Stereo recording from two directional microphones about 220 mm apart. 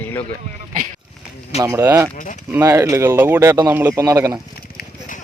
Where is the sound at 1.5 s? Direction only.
15° right (ahead or behind).